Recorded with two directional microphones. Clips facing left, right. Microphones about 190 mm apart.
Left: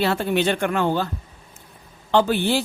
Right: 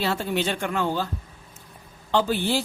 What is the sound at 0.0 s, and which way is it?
Speech, 60° left (ahead or behind).